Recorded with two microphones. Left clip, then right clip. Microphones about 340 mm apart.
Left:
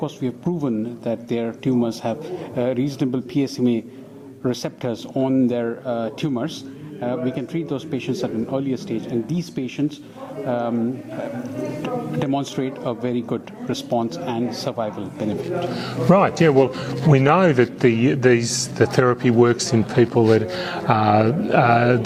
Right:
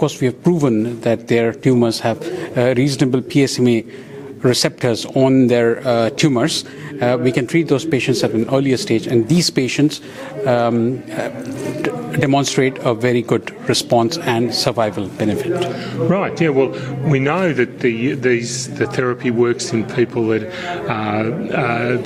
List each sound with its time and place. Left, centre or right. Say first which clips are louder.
0.0 s speech: right 9 dB; right
11.8 s speech: right 7 dB; right
16.0 s a man's voice: left 2 dB; left